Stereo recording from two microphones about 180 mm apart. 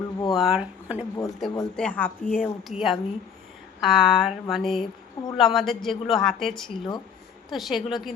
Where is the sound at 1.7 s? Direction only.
5° left (ahead or behind).